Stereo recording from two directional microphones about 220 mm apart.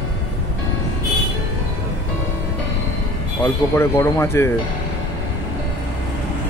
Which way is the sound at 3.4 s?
10° left (ahead or behind).